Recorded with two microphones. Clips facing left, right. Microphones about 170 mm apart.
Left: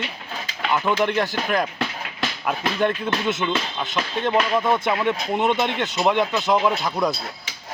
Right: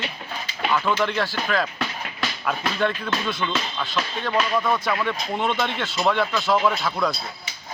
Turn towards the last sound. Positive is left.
turn(degrees=20)  # may be behind; listen again after turning